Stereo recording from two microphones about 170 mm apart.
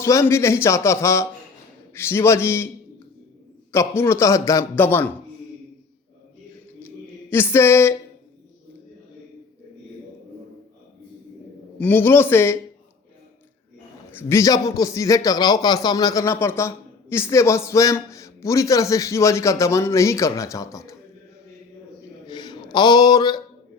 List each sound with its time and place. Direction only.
0.0 s a man's voice: 15° left (ahead or behind)
3.7 s a man's voice: 15° left (ahead or behind)
7.3 s a man's voice: 15° left (ahead or behind)
11.8 s a man's voice: 10° left (ahead or behind)
14.2 s a man's voice: 15° left (ahead or behind)
22.3 s a sound: 25° left (ahead or behind)